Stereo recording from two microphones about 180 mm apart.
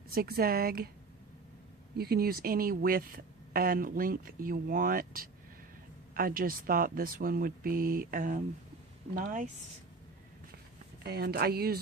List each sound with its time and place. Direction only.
0.1 s speech: 55° right (ahead or behind)
2.0 s speech: 60° right (ahead or behind)
11.0 s speech: 60° right (ahead or behind)